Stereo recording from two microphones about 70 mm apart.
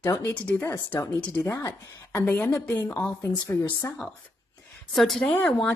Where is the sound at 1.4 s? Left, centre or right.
Left.